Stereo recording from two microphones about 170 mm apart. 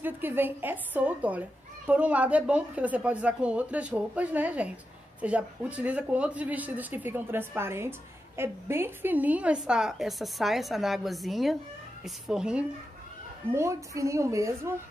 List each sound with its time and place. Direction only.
0.0 s a woman's voice: 10° right (ahead or behind)
13.5 s a woman's voice: 15° right (ahead or behind)